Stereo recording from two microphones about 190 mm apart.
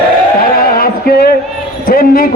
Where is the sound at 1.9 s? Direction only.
50° left (ahead or behind).